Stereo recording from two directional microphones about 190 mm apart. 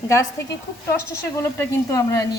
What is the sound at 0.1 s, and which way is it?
Speech, 15° left (ahead or behind).